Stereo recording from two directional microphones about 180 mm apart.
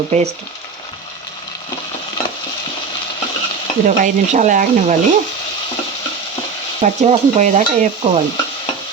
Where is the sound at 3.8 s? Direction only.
45° right (ahead or behind).